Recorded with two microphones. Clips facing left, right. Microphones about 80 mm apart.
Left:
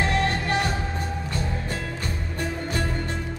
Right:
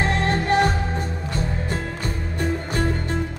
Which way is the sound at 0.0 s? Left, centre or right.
Right.